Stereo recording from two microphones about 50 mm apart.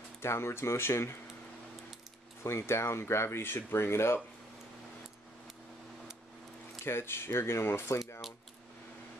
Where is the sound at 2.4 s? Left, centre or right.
Left.